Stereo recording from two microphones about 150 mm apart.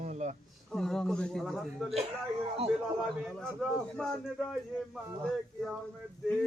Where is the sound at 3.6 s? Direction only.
Centre (ahead or behind).